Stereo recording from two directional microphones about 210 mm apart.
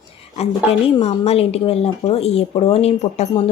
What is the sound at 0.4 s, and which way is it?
Speech, 30° left (ahead or behind).